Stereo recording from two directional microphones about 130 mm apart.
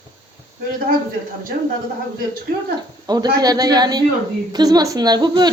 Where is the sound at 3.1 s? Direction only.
30° right (ahead or behind).